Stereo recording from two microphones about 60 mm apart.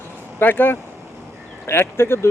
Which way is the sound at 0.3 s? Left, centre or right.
Left.